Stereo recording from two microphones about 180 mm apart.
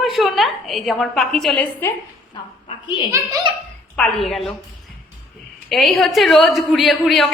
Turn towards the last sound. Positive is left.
turn(degrees=0)  # may be behind; listen again after turning